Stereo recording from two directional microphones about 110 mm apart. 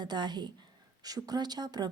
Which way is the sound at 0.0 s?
40° right (ahead or behind).